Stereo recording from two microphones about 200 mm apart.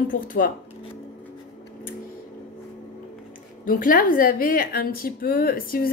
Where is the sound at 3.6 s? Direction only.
45° left (ahead or behind).